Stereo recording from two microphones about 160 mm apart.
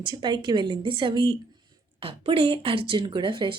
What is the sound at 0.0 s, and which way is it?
A woman's voice, 30° right (ahead or behind).